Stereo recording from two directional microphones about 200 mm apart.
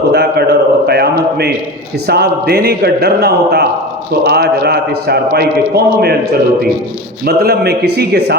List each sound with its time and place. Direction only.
0.1 s a sound: 55° right (ahead or behind)
2.0 s a man's voice: 55° right (ahead or behind)
7.3 s a man's voice: 50° right (ahead or behind)